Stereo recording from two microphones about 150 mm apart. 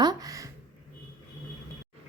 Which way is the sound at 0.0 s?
25° right (ahead or behind).